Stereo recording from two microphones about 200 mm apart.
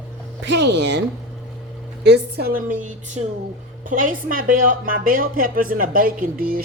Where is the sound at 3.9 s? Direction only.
45° right (ahead or behind).